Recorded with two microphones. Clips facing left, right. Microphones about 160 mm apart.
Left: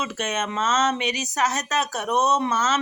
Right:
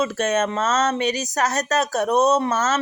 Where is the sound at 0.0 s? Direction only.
40° right (ahead or behind).